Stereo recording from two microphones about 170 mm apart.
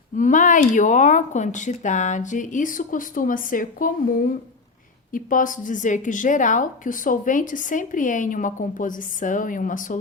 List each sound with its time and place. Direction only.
0.2 s a woman's voice: 50° left (ahead or behind)
5.1 s a woman's voice: 55° left (ahead or behind)